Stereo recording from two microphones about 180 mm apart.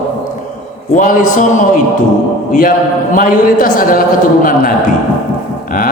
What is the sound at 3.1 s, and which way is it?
Speech, 50° left (ahead or behind).